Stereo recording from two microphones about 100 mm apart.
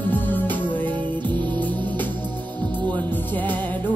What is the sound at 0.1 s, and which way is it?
Music, 20° left (ahead or behind).